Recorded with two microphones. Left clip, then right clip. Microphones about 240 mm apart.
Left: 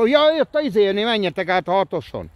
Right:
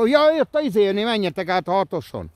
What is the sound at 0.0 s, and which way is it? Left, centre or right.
Speech, right.